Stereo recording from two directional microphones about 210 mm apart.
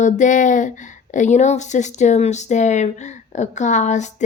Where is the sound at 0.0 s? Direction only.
35° left (ahead or behind).